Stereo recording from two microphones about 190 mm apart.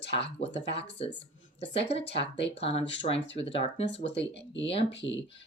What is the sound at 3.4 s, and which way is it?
Speech, 30° left (ahead or behind).